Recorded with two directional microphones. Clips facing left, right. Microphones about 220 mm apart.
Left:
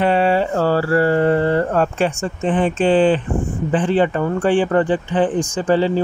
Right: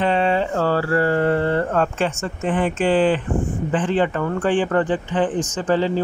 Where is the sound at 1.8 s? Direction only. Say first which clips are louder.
Left 3 dB; 15° left (ahead or behind).